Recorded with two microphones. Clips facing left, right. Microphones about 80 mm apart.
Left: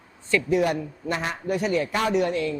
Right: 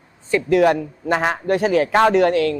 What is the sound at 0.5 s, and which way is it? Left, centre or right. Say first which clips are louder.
A man's voice: right 10 dB; right.